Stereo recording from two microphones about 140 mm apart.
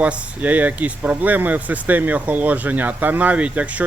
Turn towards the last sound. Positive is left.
turn(degrees=-10)  # may be behind; listen again after turning